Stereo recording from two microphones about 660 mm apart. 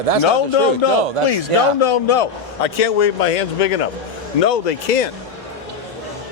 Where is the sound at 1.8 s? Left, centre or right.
Left.